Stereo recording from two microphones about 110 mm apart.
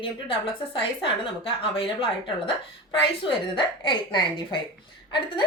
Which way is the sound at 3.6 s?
45° left (ahead or behind).